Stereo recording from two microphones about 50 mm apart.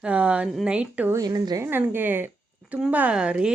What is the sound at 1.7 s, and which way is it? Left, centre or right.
Speech, right.